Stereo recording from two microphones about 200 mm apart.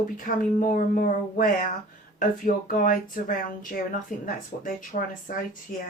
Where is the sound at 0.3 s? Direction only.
45° left (ahead or behind).